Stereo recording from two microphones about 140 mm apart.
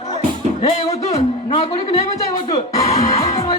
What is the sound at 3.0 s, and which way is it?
Music, 50° left (ahead or behind).